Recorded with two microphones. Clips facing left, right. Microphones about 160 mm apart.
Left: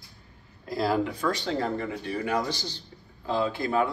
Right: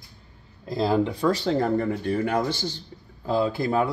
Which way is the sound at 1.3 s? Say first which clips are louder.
Right 6 dB; 40° right (ahead or behind).